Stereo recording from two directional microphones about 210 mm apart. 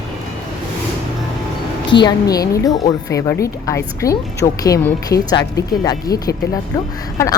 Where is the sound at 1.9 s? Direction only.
20° left (ahead or behind).